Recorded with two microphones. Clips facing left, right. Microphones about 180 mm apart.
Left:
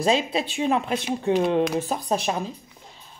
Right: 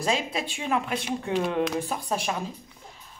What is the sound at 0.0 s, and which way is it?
Speech, 25° left (ahead or behind).